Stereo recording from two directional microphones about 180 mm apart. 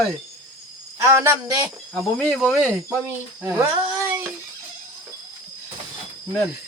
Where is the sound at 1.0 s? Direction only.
15° right (ahead or behind).